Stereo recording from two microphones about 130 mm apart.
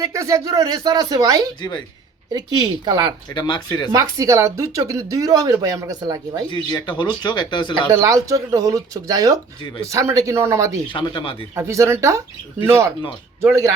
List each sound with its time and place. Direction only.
0.0 s speech: 25° right (ahead or behind)
2.8 s speech: 30° right (ahead or behind)
3.3 s speech: 30° left (ahead or behind)
3.9 s speech: 25° right (ahead or behind)
6.5 s speech: 35° left (ahead or behind)
7.9 s speech: 25° right (ahead or behind)
10.9 s speech: 35° left (ahead or behind)
11.5 s speech: 20° right (ahead or behind)